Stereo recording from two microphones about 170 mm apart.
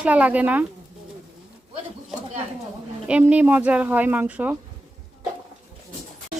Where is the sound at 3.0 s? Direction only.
10° right (ahead or behind).